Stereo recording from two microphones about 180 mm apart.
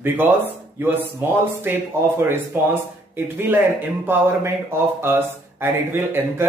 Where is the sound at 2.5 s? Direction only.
10° right (ahead or behind).